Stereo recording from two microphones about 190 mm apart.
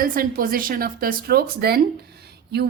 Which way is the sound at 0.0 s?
50° right (ahead or behind).